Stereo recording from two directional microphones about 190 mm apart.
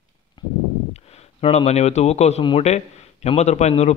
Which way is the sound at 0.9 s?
35° left (ahead or behind).